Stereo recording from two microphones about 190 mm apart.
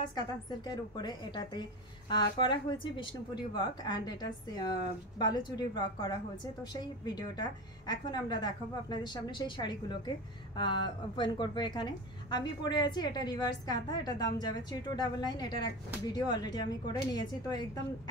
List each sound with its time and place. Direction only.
0.0 s a woman's voice: 20° left (ahead or behind)